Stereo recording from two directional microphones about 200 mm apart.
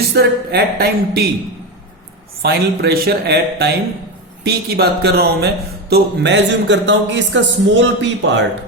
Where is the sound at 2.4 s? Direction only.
55° right (ahead or behind).